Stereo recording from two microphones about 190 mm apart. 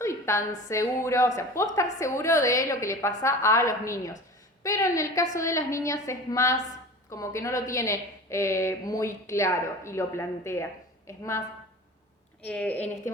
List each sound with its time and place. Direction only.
0.0 s a woman's voice: 15° left (ahead or behind)
12.5 s a woman's voice: 10° left (ahead or behind)